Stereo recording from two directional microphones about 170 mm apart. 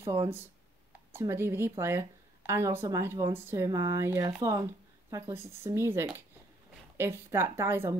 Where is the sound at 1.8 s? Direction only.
15° right (ahead or behind).